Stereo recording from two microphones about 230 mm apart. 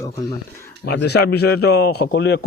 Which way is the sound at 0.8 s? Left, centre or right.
Left.